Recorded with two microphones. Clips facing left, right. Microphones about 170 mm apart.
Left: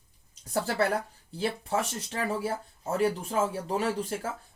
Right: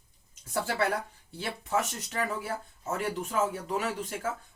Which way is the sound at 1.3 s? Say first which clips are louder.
Left 2 dB; 30° left (ahead or behind).